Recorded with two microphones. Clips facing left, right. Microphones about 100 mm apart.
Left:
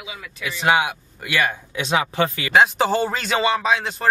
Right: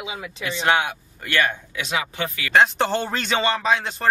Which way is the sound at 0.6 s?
5° left (ahead or behind).